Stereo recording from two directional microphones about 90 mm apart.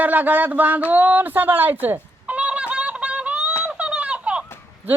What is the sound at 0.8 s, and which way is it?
Fowl, 20° right (ahead or behind).